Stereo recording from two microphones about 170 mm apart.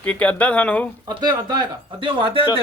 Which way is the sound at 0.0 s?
5° left (ahead or behind).